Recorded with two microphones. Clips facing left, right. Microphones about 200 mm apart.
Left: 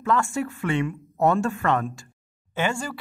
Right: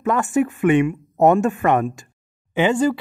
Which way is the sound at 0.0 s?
20° right (ahead or behind).